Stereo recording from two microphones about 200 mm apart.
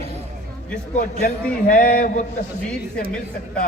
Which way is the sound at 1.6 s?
45° left (ahead or behind).